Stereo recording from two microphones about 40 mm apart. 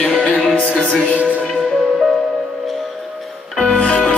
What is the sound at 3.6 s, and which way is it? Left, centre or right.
Music, left.